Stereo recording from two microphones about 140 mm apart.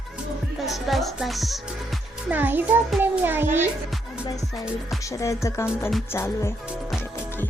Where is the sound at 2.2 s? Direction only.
10° right (ahead or behind).